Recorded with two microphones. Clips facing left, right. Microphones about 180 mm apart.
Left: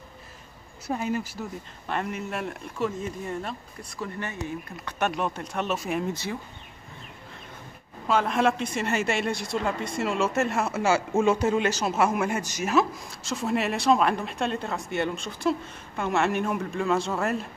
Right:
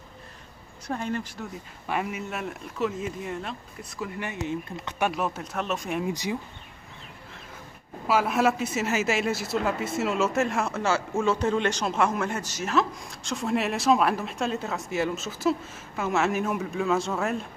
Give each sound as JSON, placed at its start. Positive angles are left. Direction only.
{"t": 0.8, "sound": "speech", "side_deg": 5}
{"t": 1.9, "sound": "speech", "side_deg": -5}
{"t": 4.2, "sound": "speech", "side_deg": -20}
{"t": 5.0, "sound": "speech", "side_deg": -5}
{"t": 6.0, "sound": "speech", "side_deg": -15}
{"t": 8.1, "sound": "speech", "side_deg": -5}